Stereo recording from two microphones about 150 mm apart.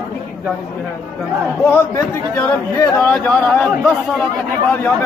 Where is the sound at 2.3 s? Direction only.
25° left (ahead or behind).